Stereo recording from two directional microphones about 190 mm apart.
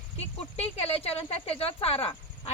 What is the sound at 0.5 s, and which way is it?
Speech, 30° left (ahead or behind).